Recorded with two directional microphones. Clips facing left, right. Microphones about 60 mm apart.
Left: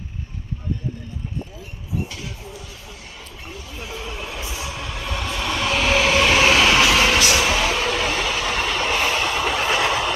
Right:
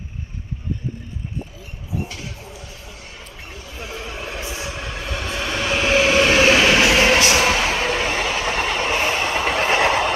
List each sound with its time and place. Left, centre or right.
4.0 s train: right
6.8 s train: right